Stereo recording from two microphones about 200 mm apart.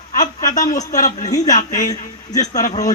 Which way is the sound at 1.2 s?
15° left (ahead or behind).